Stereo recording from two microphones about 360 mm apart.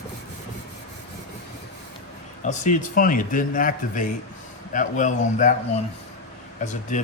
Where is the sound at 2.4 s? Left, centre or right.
Left.